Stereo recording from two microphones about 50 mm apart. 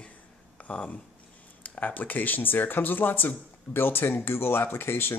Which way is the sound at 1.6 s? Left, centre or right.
Left.